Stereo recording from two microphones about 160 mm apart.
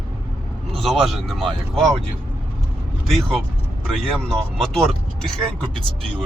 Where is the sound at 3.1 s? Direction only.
Centre (ahead or behind).